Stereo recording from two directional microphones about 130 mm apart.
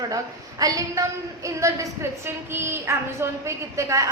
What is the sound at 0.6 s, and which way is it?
A woman's voice, 25° right (ahead or behind).